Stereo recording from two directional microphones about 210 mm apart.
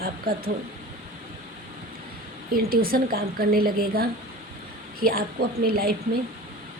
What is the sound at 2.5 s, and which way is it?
A woman's voice, 45° right (ahead or behind).